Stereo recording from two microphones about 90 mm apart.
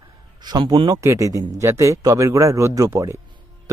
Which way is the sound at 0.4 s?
60° right (ahead or behind).